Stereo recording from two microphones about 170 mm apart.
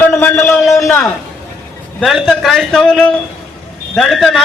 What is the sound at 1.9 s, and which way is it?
A man's voice, centre (ahead or behind).